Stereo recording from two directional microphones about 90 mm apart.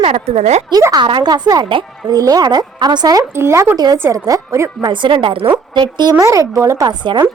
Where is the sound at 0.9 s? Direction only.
60° right (ahead or behind).